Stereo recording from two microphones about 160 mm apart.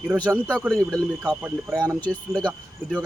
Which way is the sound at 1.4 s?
15° right (ahead or behind).